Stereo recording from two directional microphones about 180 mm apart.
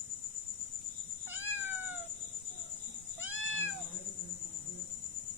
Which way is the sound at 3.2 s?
90° left.